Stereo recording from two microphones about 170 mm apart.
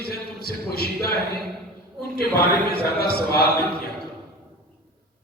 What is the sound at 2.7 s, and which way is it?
Speech, 70° left (ahead or behind).